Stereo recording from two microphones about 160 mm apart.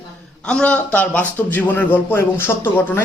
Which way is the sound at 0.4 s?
5° left (ahead or behind).